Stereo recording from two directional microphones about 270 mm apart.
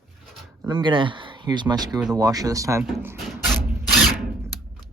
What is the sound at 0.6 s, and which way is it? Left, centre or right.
Speech, centre.